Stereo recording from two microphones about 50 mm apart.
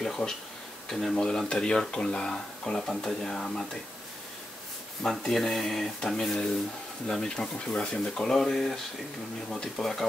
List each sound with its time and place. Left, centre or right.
0.0 s a sound: centre
0.8 s speech: centre
1.1 s speech: centre
5.0 s speech: centre
5.9 s speech: centre